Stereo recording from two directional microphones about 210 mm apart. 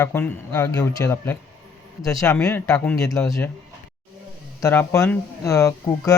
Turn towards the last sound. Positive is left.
turn(degrees=15)  # may be behind; listen again after turning